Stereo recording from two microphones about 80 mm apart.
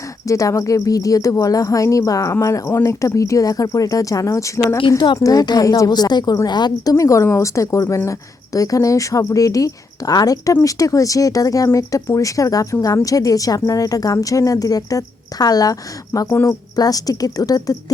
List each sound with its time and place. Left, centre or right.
0.3 s a woman's voice: left
4.9 s a woman's voice: left
5.1 s a woman's voice: left
5.9 s a woman's voice: left
6.9 s a woman's voice: left
16.2 s speech: left
16.7 s a woman's voice: left